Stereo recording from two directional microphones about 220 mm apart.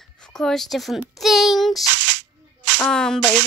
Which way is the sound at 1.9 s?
55° right (ahead or behind).